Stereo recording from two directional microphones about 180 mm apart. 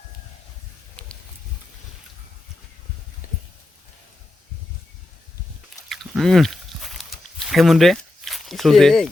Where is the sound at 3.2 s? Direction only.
50° left (ahead or behind).